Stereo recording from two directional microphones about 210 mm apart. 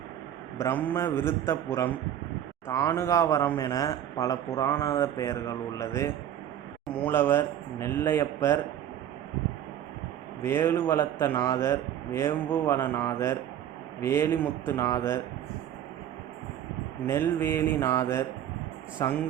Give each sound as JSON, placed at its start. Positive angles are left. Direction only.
{"t": 0.6, "sound": "a man's voice", "side_deg": 10}
{"t": 10.4, "sound": "a man's voice", "side_deg": 10}
{"t": 17.1, "sound": "a man's voice", "side_deg": 10}